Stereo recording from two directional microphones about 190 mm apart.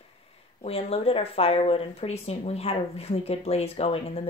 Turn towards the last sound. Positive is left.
turn(degrees=30)  # may be behind; listen again after turning